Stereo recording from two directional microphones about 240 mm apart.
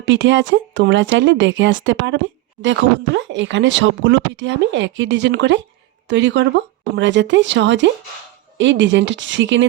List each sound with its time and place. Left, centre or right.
0.0 s speech: right